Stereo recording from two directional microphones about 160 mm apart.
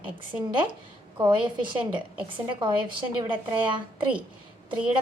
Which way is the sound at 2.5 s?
30° right (ahead or behind).